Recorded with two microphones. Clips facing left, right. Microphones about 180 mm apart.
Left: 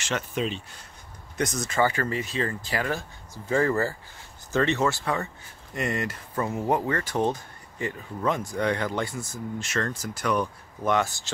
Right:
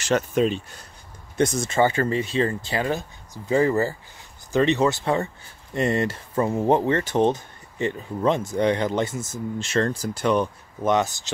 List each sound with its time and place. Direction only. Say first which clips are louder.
0.0 s speech: right 8 dB; 40° right (ahead or behind)
1.3 s speech: right 6 dB; 30° right (ahead or behind)